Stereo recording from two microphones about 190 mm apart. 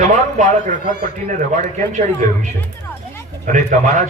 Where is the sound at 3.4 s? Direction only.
40° right (ahead or behind).